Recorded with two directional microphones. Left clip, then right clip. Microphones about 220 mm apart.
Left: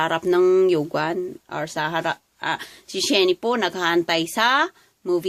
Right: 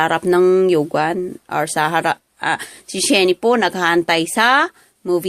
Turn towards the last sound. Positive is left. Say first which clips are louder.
# right 4 dB
turn(degrees=-15)  # may be behind; listen again after turning